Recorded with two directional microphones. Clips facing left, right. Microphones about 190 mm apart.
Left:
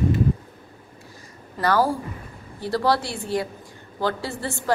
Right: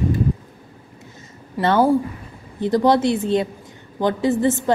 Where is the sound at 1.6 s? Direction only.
25° right (ahead or behind).